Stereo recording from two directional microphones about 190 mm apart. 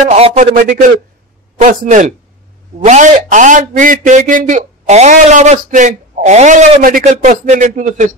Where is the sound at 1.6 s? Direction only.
40° right (ahead or behind).